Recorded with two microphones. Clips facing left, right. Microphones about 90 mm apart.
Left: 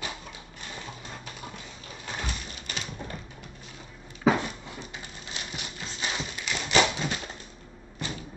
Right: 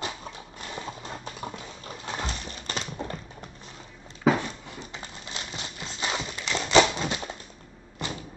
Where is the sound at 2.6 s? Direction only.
40° right (ahead or behind).